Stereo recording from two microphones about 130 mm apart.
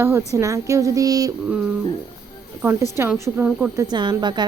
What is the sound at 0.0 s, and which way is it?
Speech, 20° right (ahead or behind).